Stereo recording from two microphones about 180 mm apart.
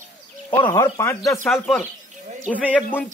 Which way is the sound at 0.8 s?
20° left (ahead or behind).